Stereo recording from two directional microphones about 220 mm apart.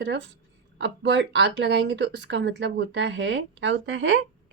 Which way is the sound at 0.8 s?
55° right (ahead or behind).